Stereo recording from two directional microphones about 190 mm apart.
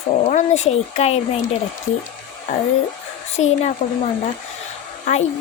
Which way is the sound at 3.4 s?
30° left (ahead or behind).